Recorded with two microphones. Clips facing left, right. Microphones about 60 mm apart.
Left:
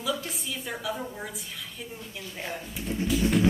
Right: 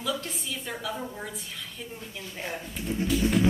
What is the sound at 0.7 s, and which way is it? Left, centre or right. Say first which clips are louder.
Speech: left 2 dB; centre.